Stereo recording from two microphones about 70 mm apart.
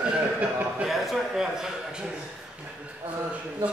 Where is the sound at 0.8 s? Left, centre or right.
Centre.